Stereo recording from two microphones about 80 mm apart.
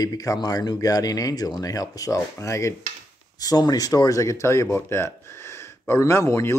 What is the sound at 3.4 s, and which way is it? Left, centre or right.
Speech, left.